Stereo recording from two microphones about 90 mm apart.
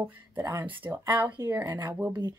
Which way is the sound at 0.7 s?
20° right (ahead or behind).